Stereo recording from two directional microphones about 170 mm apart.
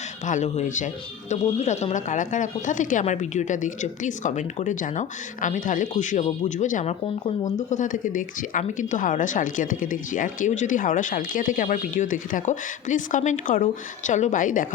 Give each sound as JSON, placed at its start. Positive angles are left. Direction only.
{"t": 0.3, "sound": "speech", "side_deg": 45}